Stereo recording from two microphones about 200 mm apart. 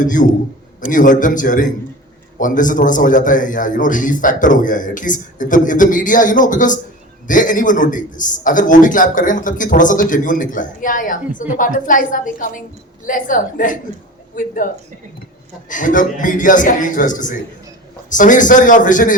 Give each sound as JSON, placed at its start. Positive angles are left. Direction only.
{"t": 0.0, "sound": "a man's voice", "side_deg": 40}
{"t": 15.7, "sound": "a man's voice", "side_deg": 40}